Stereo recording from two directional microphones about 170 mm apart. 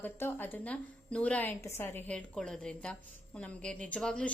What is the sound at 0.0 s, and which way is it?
A woman's voice, 10° left (ahead or behind).